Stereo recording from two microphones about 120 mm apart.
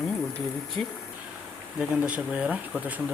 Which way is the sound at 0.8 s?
60° right (ahead or behind).